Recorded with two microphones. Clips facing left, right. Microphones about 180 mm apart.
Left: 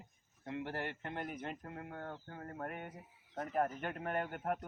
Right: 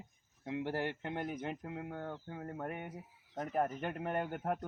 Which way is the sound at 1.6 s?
15° right (ahead or behind).